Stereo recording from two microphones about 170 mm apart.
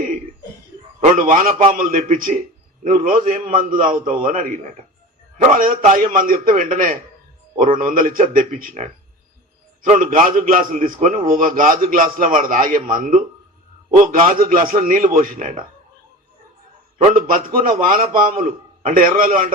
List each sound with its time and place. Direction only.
1.1 s a man's voice: 55° right (ahead or behind)
17.0 s a man's voice: 50° right (ahead or behind)